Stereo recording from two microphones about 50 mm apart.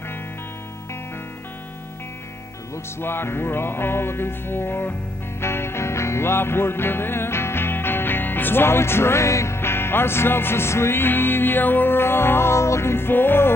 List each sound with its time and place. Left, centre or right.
3.0 s music: left
9.6 s music: left